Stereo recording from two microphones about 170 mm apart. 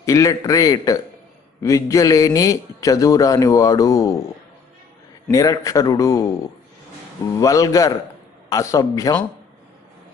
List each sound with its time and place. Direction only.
0.0 s a man's voice: 20° left (ahead or behind)
5.3 s a man's voice: 20° left (ahead or behind)
7.3 s a man's voice: 20° left (ahead or behind)